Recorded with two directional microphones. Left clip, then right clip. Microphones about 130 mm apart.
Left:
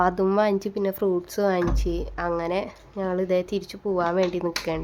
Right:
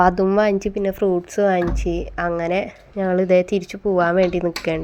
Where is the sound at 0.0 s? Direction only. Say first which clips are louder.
Right 5 dB; 30° right (ahead or behind).